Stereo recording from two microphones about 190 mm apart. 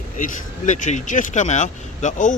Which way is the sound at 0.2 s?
40° left (ahead or behind).